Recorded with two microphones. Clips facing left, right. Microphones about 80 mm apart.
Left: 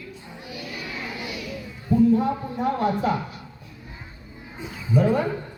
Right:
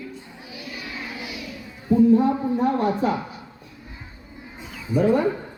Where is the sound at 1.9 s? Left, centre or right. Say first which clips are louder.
Right 3 dB; centre.